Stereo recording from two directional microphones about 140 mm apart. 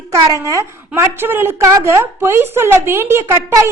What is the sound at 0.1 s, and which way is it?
A woman's voice, 25° right (ahead or behind).